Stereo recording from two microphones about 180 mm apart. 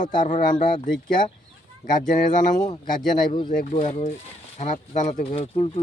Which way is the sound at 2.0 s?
45° left (ahead or behind).